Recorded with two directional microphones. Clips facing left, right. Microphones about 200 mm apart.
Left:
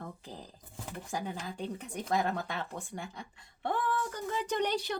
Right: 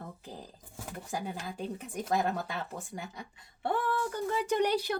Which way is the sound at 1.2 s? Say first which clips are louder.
Even; 5° right (ahead or behind).